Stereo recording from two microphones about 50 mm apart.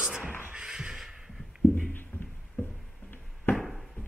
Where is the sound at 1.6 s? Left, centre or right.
Left.